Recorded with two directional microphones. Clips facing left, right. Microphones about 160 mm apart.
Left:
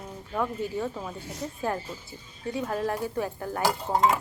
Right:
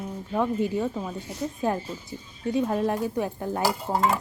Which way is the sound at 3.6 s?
5° right (ahead or behind).